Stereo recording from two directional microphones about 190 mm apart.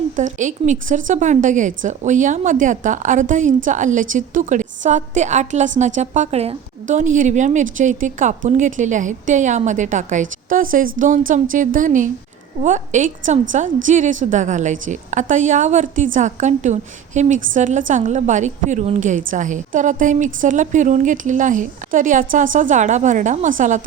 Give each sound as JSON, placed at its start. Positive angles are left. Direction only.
{"t": 0.2, "sound": "a woman's voice", "side_deg": -40}